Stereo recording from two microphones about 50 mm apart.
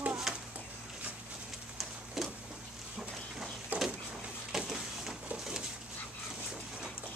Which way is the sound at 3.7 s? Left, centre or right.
Right.